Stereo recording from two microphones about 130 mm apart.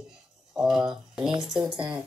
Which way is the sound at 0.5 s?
5° right (ahead or behind).